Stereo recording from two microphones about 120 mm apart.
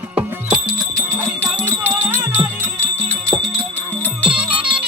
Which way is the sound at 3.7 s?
15° left (ahead or behind).